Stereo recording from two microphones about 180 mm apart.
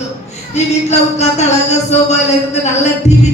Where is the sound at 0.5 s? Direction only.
40° left (ahead or behind).